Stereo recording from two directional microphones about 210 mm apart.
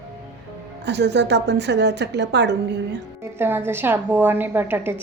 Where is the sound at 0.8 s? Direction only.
55° right (ahead or behind).